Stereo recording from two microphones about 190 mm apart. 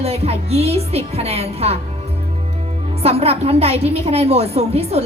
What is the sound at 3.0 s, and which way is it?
A woman's voice, 30° right (ahead or behind).